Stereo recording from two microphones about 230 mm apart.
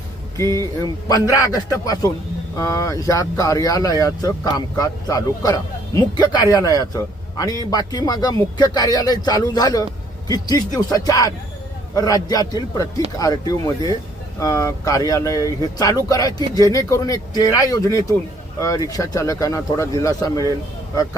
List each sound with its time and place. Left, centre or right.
0.6 s speech: centre